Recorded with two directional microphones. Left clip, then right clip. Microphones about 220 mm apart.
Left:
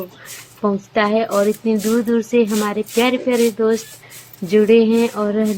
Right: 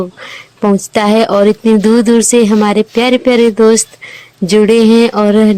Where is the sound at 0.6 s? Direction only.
50° right (ahead or behind).